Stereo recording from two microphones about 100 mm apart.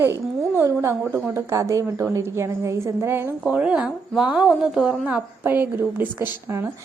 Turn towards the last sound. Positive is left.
turn(degrees=-25)  # may be behind; listen again after turning